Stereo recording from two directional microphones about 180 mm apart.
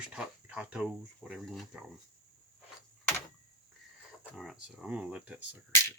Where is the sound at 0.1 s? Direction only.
5° right (ahead or behind).